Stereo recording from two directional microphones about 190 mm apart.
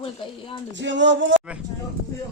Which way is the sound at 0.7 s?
70° right (ahead or behind).